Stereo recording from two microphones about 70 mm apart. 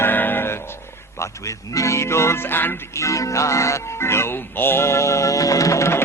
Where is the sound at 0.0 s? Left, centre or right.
Left.